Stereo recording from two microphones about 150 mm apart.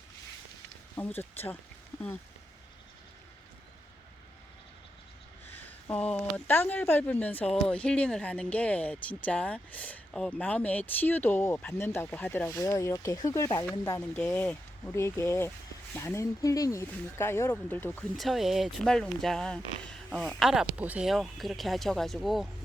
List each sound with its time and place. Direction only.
0.9 s speech: 10° left (ahead or behind)
5.5 s speech: 10° left (ahead or behind)
14.3 s speech: 10° left (ahead or behind)
18.2 s speech: centre (ahead or behind)